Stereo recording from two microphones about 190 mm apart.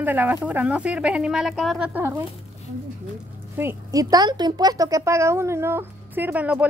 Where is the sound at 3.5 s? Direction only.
15° right (ahead or behind).